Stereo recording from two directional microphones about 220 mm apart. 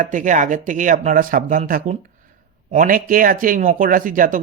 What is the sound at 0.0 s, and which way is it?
Speech, 35° right (ahead or behind).